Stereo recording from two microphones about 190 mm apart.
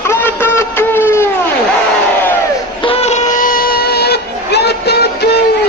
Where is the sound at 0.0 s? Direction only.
10° left (ahead or behind).